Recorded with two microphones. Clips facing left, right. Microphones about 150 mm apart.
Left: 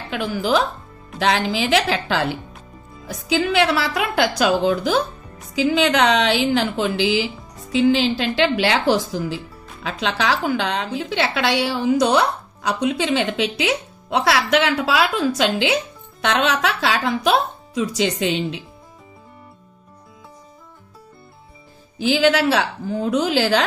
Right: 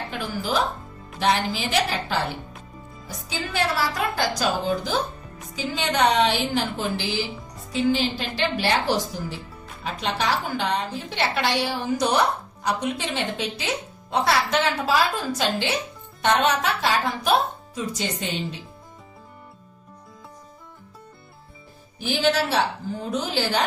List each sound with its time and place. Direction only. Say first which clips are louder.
0.4 s a woman's voice: left 5 dB; 90° left
3.3 s a woman's voice: left 8 dB; 75° left (ahead or behind)
5.6 s a woman's voice: left 6 dB; 90° left
22.0 s a woman's voice: left 6 dB; 85° left